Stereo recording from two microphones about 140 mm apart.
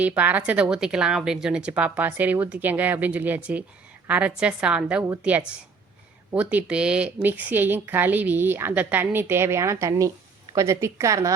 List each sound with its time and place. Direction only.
0.2 s a woman's voice: 10° right (ahead or behind)